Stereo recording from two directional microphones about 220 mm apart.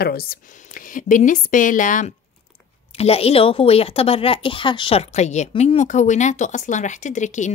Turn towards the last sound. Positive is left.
turn(degrees=35)  # may be behind; listen again after turning